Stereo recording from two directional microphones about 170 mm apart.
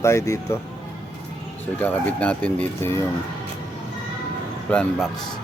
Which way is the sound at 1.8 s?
10° left (ahead or behind).